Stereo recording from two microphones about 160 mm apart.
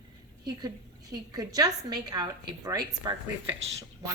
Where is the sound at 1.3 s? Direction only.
25° right (ahead or behind).